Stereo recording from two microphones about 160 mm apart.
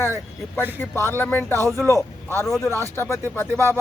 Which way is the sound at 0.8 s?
15° left (ahead or behind).